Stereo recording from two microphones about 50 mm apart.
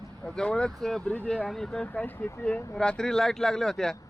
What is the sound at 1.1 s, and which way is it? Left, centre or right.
Speech, left.